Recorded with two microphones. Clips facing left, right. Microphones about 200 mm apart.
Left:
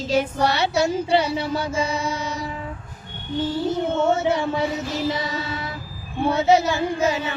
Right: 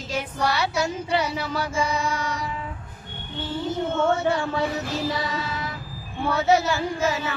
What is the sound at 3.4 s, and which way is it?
Speech, 40° left (ahead or behind).